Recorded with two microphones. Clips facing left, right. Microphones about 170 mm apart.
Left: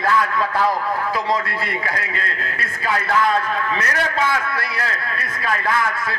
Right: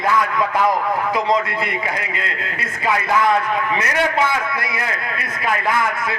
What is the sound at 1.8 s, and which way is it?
A man's voice, 20° right (ahead or behind).